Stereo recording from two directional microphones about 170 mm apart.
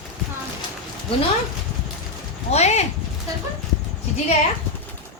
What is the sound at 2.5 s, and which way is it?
Speech, 40° left (ahead or behind).